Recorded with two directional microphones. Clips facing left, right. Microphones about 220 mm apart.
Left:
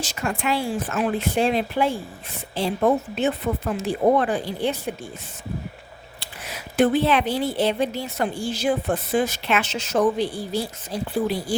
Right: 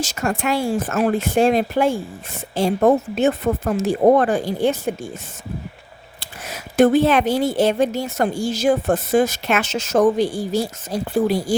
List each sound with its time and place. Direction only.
0.0 s a woman's voice: 45° right (ahead or behind)
6.1 s a woman's voice: 45° right (ahead or behind)